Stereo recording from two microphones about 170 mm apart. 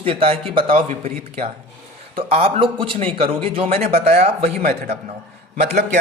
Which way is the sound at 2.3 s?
35° right (ahead or behind).